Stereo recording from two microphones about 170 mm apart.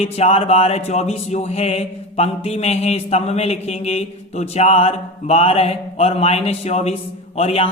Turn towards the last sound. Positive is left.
turn(degrees=35)  # may be behind; listen again after turning